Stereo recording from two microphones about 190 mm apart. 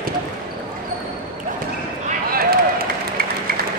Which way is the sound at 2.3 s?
50° right (ahead or behind).